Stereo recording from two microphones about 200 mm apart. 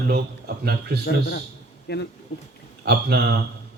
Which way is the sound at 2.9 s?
55° right (ahead or behind).